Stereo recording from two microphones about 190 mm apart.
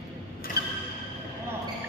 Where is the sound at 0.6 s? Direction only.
55° left (ahead or behind).